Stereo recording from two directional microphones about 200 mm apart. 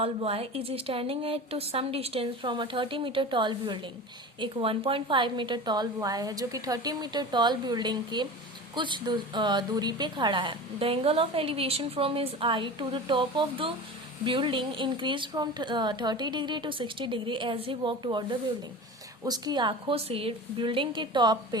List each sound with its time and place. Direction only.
0.0 s a woman's voice: 30° right (ahead or behind)